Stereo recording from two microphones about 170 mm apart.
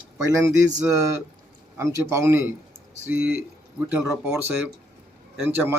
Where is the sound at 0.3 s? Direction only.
15° right (ahead or behind).